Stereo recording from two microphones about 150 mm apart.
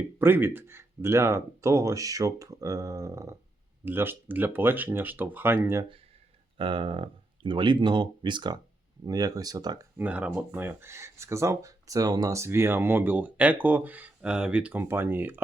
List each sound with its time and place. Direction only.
0.2 s speech: 15° right (ahead or behind)
6.6 s speech: 35° right (ahead or behind)
10.0 s speech: 10° right (ahead or behind)